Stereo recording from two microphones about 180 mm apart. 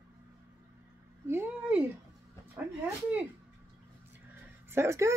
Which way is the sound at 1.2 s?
10° right (ahead or behind).